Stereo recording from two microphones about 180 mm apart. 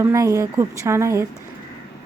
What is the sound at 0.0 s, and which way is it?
A woman's voice, 15° right (ahead or behind).